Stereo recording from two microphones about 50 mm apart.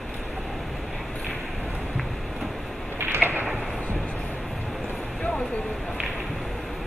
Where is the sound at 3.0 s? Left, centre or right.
Right.